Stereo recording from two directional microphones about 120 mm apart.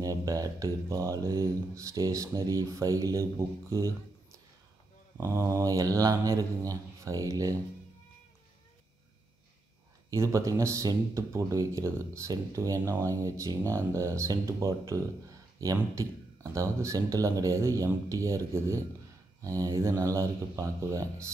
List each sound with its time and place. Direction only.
0.0 s speech: 30° right (ahead or behind)
5.1 s speech: 20° right (ahead or behind)
10.1 s speech: 25° right (ahead or behind)